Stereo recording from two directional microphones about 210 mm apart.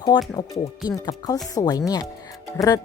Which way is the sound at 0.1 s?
20° left (ahead or behind).